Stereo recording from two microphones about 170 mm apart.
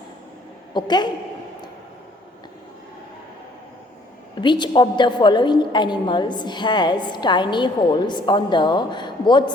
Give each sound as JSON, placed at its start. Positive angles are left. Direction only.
{"t": 0.7, "sound": "a woman's voice", "side_deg": 25}
{"t": 4.4, "sound": "a woman's voice", "side_deg": 25}